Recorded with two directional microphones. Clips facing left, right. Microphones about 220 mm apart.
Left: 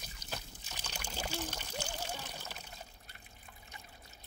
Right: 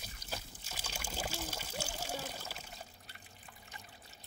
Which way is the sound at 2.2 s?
5° right (ahead or behind).